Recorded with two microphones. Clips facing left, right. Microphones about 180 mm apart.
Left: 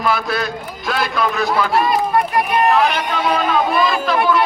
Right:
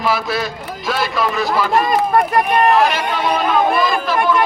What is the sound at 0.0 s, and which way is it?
A man's voice, centre (ahead or behind).